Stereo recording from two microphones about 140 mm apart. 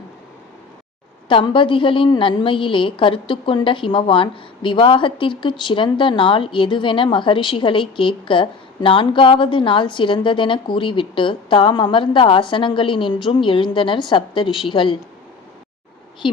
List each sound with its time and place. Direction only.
1.3 s a woman's voice: 35° left (ahead or behind)
16.2 s a woman's voice: 35° left (ahead or behind)